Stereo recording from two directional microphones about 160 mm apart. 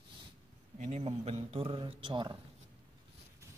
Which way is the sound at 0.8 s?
45° right (ahead or behind).